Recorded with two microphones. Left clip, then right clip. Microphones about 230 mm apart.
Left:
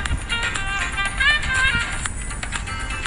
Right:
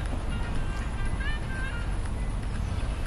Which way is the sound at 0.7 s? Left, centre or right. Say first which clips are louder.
Left 16 dB; left.